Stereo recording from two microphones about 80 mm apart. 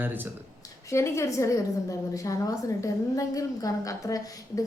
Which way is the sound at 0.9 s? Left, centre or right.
Left.